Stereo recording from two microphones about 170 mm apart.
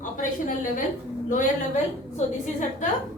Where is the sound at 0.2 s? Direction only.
50° left (ahead or behind).